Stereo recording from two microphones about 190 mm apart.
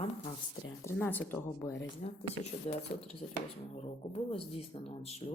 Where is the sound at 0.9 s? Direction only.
10° left (ahead or behind).